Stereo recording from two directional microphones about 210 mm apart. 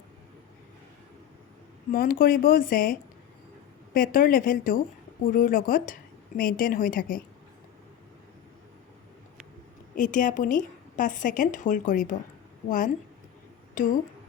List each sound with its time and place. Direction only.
1.9 s a woman's voice: 45° left (ahead or behind)
9.9 s a woman's voice: 40° left (ahead or behind)